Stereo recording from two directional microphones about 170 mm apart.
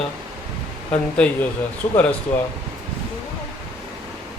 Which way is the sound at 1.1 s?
5° left (ahead or behind).